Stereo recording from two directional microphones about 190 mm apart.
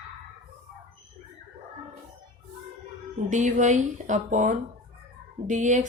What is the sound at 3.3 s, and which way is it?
Speech, 40° right (ahead or behind).